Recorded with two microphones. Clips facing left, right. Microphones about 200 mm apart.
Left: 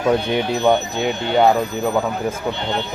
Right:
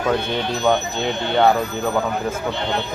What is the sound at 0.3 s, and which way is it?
Speech, 15° left (ahead or behind).